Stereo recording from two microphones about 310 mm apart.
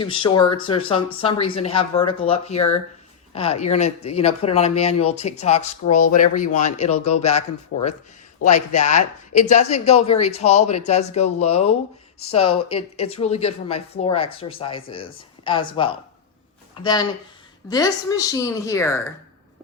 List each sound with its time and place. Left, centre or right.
0.0 s speech: centre
8.4 s speech: left